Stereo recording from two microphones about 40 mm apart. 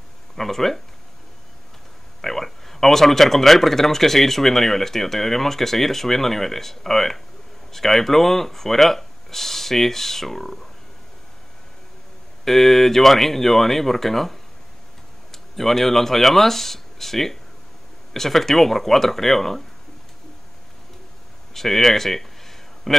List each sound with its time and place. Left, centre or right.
0.4 s speech: centre
2.2 s speech: centre
12.4 s speech: centre
21.5 s a sound: centre